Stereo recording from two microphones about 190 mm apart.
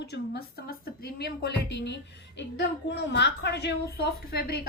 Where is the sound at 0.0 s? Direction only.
60° left (ahead or behind).